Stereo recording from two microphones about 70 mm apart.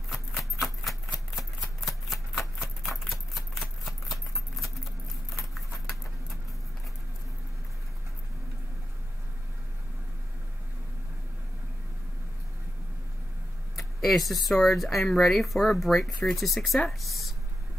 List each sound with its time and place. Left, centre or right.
0.1 s a sound: centre
3.1 s typewriter: centre
3.8 s a sound: centre
13.7 s speech: centre
16.1 s speech: centre
16.3 s speech: centre